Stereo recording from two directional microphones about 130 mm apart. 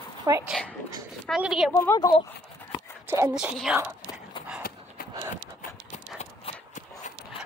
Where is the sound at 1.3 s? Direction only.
5° right (ahead or behind).